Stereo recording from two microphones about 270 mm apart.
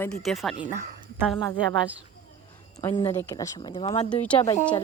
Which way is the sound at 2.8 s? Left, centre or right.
Centre.